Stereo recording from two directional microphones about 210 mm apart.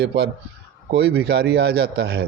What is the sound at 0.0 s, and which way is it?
Speech, 55° right (ahead or behind).